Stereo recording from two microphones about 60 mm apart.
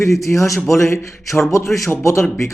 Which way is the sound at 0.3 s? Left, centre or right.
Left.